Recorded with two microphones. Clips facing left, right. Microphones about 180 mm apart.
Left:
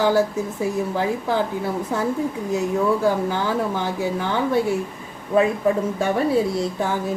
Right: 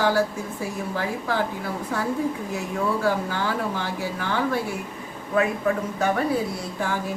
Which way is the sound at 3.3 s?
20° left (ahead or behind).